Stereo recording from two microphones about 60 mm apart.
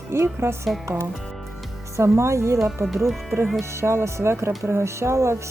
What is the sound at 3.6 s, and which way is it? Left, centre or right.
Speech, right.